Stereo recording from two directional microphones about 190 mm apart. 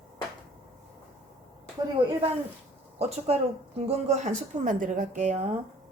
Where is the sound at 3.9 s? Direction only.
35° right (ahead or behind).